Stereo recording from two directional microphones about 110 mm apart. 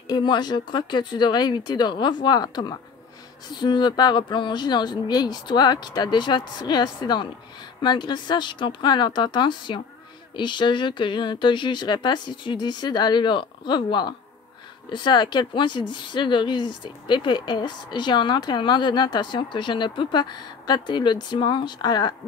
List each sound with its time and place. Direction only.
0.1 s speech: 40° left (ahead or behind)